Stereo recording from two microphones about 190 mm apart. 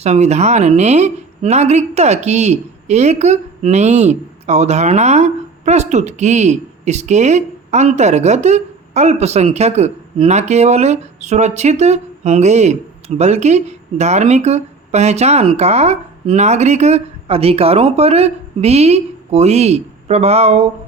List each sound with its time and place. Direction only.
0.0 s a woman's voice: 35° right (ahead or behind)